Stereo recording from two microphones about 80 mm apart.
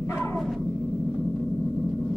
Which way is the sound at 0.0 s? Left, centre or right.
Left.